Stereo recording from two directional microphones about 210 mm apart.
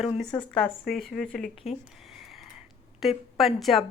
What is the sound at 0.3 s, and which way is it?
A woman's voice, 5° left (ahead or behind).